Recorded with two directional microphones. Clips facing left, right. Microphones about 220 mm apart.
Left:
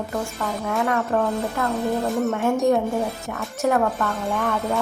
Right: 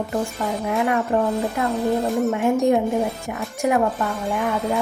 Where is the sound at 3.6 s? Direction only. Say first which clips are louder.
Right 1 dB; 15° right (ahead or behind).